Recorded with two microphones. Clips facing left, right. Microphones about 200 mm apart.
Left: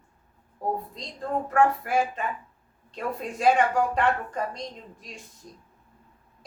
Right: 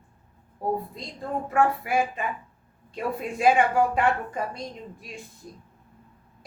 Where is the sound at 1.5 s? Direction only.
10° right (ahead or behind).